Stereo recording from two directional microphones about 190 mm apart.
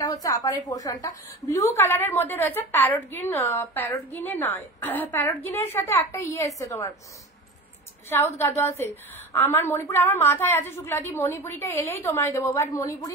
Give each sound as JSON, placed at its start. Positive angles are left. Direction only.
{"t": 0.0, "sound": "a woman's voice", "side_deg": 20}
{"t": 8.4, "sound": "a woman's voice", "side_deg": 15}